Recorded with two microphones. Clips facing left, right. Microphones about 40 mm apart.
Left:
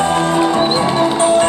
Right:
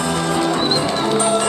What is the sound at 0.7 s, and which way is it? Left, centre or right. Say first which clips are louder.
Music: left 4 dB; left.